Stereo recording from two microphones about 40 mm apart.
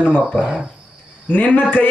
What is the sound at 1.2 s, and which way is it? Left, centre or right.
Speech, left.